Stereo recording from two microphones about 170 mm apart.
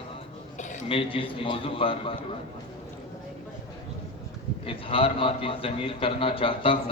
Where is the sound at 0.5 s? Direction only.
45° left (ahead or behind).